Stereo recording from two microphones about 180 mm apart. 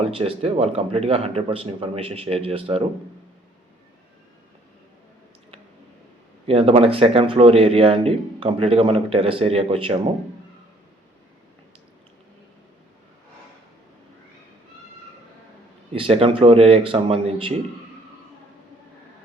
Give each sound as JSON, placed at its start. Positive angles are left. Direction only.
{"t": 0.0, "sound": "speech", "side_deg": -30}
{"t": 6.5, "sound": "speech", "side_deg": -30}
{"t": 16.0, "sound": "speech", "side_deg": -30}